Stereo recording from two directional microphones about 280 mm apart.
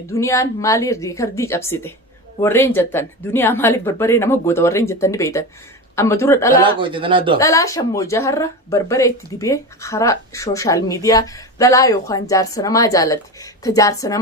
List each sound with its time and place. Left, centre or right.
0.1 s speech: centre
6.7 s a man's voice: centre
7.3 s speech: centre